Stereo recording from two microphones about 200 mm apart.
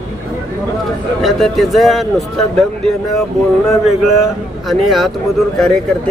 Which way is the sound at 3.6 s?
Centre (ahead or behind).